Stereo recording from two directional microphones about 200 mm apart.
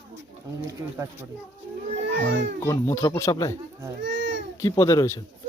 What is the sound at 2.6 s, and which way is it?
Speech, 15° left (ahead or behind).